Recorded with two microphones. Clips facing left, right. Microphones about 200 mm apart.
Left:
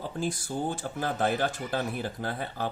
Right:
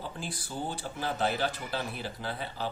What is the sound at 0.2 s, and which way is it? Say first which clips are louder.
Speech: left 9 dB; 45° left (ahead or behind).